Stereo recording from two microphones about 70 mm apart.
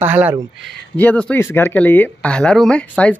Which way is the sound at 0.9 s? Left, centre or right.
Left.